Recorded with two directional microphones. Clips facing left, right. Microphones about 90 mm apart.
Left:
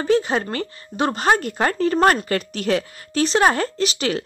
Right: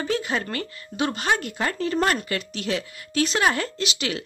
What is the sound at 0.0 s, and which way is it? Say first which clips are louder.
A woman's voice: left 7 dB; 30° left (ahead or behind).